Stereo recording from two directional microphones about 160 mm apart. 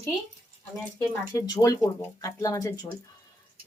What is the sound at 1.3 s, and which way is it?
Speech, 20° left (ahead or behind).